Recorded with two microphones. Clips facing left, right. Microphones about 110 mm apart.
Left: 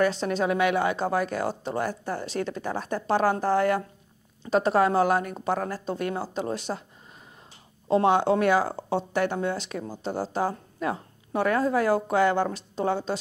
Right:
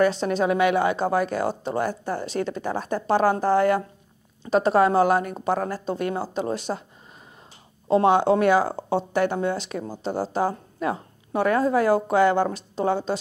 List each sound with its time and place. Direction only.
0.0 s speech: 20° right (ahead or behind)
6.5 s speech: 20° right (ahead or behind)
7.9 s speech: 25° right (ahead or behind)
8.7 s speech: 35° right (ahead or behind)
9.1 s speech: 25° right (ahead or behind)
9.8 s speech: 35° right (ahead or behind)